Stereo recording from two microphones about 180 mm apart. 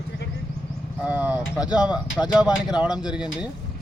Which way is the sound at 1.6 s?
20° left (ahead or behind).